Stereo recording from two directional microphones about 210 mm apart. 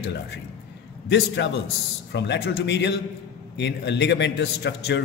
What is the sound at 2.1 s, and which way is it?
A man's voice, 55° left (ahead or behind).